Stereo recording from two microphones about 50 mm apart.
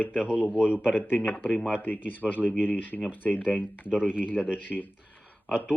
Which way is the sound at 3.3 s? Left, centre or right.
Centre.